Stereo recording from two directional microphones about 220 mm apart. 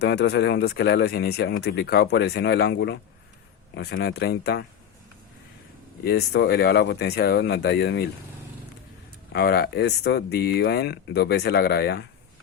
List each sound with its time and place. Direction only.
0.0 s speech: 50° left (ahead or behind)
6.1 s speech: 50° left (ahead or behind)
9.3 s speech: 45° left (ahead or behind)